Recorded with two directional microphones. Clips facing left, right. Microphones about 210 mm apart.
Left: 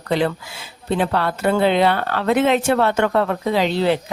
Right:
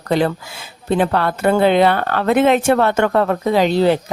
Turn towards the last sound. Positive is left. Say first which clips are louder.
# right 4 dB
turn(degrees=-45)  # may be behind; listen again after turning